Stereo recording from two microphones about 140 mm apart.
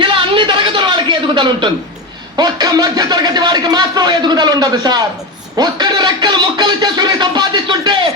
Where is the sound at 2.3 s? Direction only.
25° right (ahead or behind).